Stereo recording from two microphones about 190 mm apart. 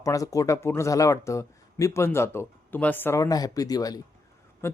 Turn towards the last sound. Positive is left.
turn(degrees=10)  # may be behind; listen again after turning